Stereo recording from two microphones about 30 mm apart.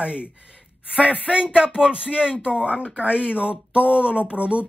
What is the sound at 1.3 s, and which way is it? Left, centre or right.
Speech, right.